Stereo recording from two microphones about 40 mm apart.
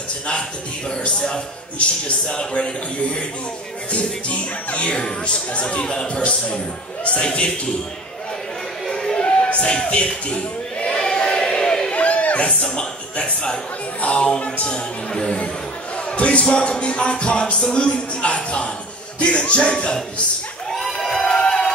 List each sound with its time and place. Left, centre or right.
0.3 s a man's voice: left
3.9 s music: left
4.9 s a man's voice: left
8.8 s a sound: centre
9.2 s crowd: left
10.9 s a sound: centre
11.9 s a sound: left
12.6 s a man's voice: left
20.7 s crowd: centre
21.2 s music: left